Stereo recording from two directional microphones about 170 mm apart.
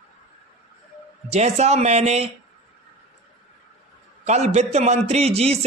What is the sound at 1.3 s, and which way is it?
Speech, 40° right (ahead or behind).